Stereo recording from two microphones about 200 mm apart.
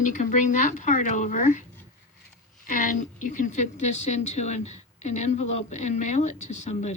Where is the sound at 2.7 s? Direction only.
40° left (ahead or behind).